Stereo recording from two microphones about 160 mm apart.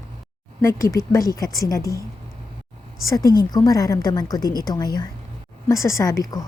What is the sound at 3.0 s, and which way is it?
A woman's voice, 20° left (ahead or behind).